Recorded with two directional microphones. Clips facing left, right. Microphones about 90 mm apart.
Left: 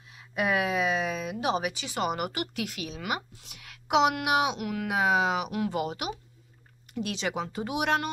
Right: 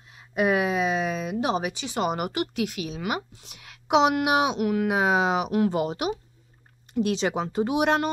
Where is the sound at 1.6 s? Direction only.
30° right (ahead or behind).